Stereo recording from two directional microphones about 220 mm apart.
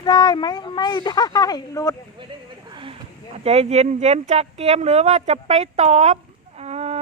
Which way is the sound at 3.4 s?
30° right (ahead or behind).